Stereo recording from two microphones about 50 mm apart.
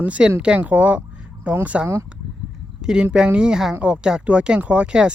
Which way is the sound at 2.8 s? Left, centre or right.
Centre.